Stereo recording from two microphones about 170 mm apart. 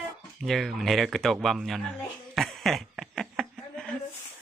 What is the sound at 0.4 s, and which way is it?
Speech, centre (ahead or behind).